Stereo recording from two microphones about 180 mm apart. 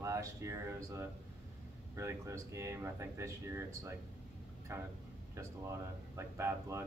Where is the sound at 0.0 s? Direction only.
15° right (ahead or behind).